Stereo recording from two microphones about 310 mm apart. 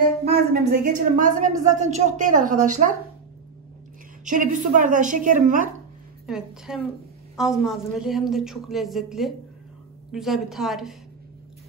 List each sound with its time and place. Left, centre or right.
0.5 s speech: right
4.2 s speech: right
6.2 s a woman's voice: centre